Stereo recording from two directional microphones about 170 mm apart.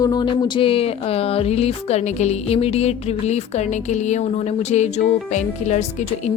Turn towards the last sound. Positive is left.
turn(degrees=45)  # may be behind; listen again after turning